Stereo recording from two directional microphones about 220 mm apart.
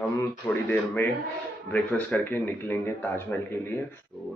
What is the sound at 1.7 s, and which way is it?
Speech, 10° left (ahead or behind).